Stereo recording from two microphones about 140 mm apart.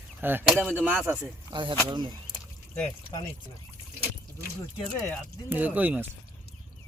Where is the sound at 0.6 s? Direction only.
5° left (ahead or behind).